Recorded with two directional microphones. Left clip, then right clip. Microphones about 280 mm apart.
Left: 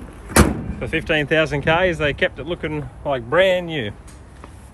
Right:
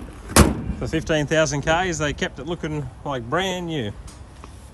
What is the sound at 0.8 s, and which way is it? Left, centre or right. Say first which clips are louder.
Speech: left 3 dB; centre.